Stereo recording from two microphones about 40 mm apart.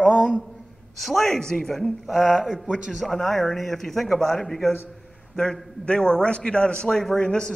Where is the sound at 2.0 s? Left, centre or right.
Centre.